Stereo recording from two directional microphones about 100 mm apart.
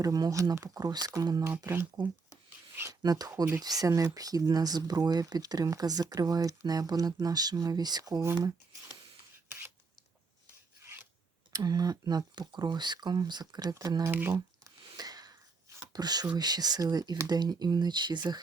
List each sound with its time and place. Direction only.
0.0 s speech: 35° right (ahead or behind)
1.6 s speech: 20° right (ahead or behind)
2.9 s speech: 40° right (ahead or behind)
8.2 s speech: 25° right (ahead or behind)
9.5 s rub: 20° right (ahead or behind)
11.5 s speech: 40° right (ahead or behind)
14.0 s speech: 20° right (ahead or behind)
14.3 s a sound: 35° right (ahead or behind)
16.3 s speech: 45° right (ahead or behind)